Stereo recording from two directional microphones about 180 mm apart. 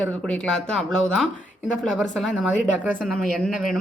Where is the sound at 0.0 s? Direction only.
5° left (ahead or behind).